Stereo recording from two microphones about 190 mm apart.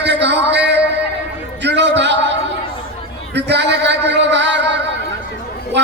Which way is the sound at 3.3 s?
65° right (ahead or behind).